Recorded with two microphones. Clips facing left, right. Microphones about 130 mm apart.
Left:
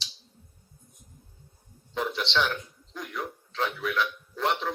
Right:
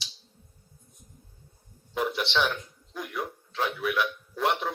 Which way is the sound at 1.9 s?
10° right (ahead or behind).